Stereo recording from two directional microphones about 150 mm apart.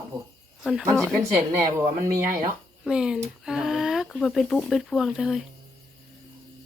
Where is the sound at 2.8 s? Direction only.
5° right (ahead or behind).